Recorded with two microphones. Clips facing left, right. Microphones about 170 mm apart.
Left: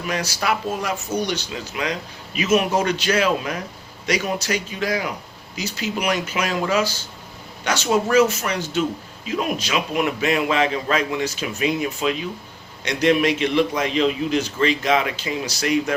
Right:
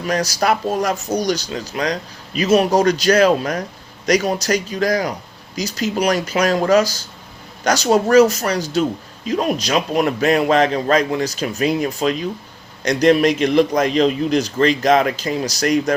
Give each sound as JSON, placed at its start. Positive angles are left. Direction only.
{"t": 0.1, "sound": "speech", "side_deg": -40}